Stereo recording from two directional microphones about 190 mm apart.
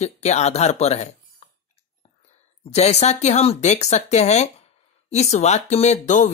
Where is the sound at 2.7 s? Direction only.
35° left (ahead or behind).